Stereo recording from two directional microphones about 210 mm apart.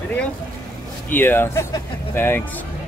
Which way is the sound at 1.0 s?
10° left (ahead or behind).